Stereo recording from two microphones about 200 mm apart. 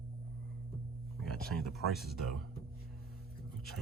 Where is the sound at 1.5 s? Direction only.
50° left (ahead or behind).